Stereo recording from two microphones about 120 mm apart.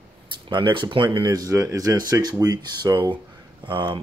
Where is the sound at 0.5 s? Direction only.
40° right (ahead or behind).